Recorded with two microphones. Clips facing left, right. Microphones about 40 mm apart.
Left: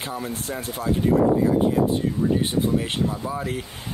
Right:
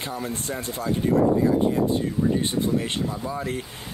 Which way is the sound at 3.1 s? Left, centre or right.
Centre.